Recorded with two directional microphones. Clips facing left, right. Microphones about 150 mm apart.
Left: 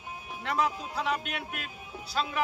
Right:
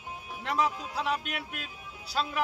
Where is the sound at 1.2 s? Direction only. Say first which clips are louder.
Left 1 dB; 50° left (ahead or behind).